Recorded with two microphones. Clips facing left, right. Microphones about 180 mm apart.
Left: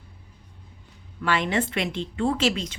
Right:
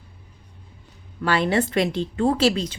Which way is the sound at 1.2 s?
35° right (ahead or behind).